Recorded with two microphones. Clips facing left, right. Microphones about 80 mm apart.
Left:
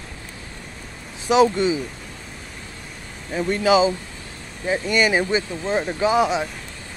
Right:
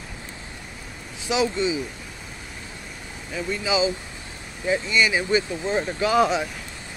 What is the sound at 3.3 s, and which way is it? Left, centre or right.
Speech, left.